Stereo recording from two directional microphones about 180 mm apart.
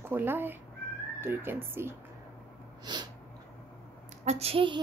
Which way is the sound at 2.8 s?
25° right (ahead or behind).